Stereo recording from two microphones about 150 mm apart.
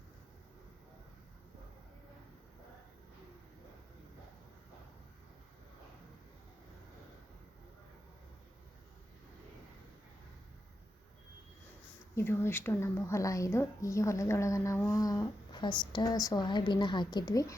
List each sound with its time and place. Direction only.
12.1 s a woman's voice: 15° left (ahead or behind)